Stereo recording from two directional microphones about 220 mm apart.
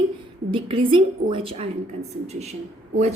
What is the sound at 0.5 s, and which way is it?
A woman's voice, 25° right (ahead or behind).